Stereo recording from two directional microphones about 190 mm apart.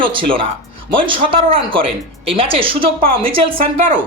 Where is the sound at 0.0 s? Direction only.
25° right (ahead or behind).